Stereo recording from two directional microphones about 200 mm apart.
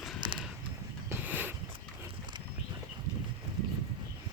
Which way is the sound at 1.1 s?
10° right (ahead or behind).